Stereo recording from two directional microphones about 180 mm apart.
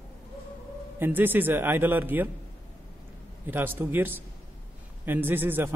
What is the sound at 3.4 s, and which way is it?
Speech, 10° right (ahead or behind).